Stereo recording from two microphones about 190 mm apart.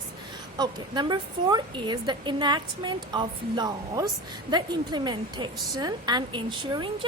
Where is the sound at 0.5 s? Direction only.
25° right (ahead or behind).